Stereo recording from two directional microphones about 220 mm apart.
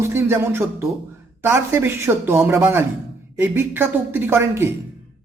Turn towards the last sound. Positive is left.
turn(degrees=-10)  # may be behind; listen again after turning